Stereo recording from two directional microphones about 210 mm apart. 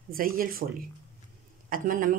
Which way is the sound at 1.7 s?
40° right (ahead or behind).